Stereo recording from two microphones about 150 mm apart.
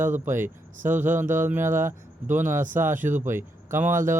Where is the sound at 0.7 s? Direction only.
55° right (ahead or behind).